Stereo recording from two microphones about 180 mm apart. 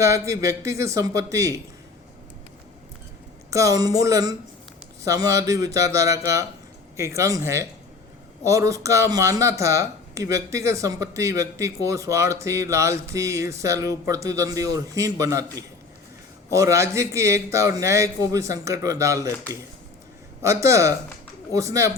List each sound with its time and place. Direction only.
0.0 s speech: 15° right (ahead or behind)
3.5 s speech: 20° right (ahead or behind)
20.4 s speech: 15° right (ahead or behind)